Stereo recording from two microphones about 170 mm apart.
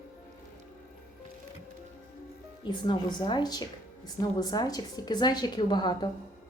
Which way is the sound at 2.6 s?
25° left (ahead or behind).